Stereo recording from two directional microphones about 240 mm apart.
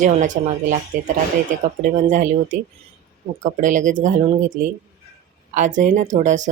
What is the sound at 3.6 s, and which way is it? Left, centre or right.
Speech, right.